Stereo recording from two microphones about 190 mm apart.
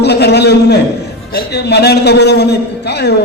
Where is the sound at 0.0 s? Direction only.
60° left (ahead or behind).